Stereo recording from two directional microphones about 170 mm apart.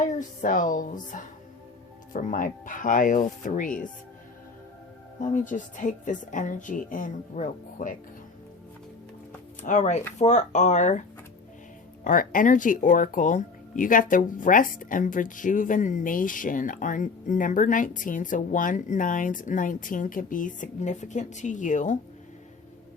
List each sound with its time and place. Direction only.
0.0 s speech: 50° left (ahead or behind)
5.2 s speech: 50° left (ahead or behind)
9.6 s speech: 45° left (ahead or behind)
12.0 s speech: 55° left (ahead or behind)